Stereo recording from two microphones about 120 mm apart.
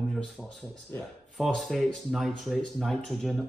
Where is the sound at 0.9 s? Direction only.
20° left (ahead or behind).